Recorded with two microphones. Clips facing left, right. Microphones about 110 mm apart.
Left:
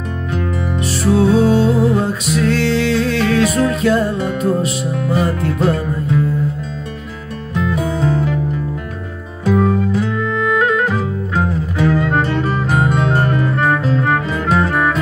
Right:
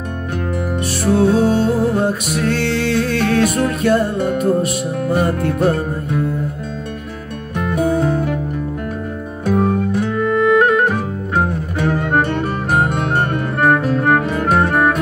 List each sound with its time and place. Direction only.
0.7 s music: 55° right (ahead or behind)
7.5 s music: 55° right (ahead or behind)
9.5 s music: 50° right (ahead or behind)